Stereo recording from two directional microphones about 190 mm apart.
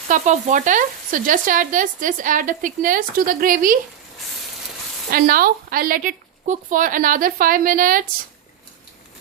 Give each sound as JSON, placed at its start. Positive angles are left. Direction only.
{"t": 0.1, "sound": "speech", "side_deg": -40}
{"t": 5.1, "sound": "speech", "side_deg": -50}